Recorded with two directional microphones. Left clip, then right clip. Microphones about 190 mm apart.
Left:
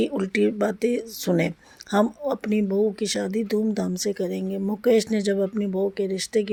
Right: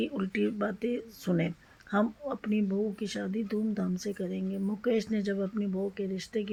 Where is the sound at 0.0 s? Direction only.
45° left (ahead or behind).